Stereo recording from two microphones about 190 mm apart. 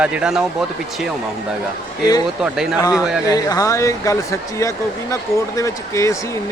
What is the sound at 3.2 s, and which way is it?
Speech, 20° left (ahead or behind).